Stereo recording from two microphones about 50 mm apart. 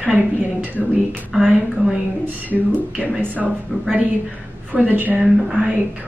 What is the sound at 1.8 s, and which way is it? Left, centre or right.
Speech, right.